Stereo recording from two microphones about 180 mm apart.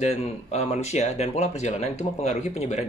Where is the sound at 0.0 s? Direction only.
40° left (ahead or behind).